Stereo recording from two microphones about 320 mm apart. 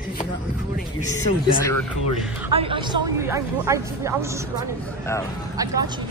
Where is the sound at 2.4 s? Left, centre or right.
Centre.